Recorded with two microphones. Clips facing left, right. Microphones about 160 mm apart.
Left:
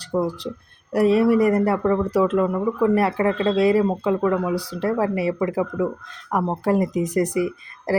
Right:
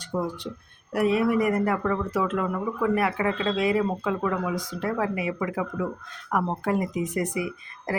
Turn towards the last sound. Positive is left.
turn(degrees=35)  # may be behind; listen again after turning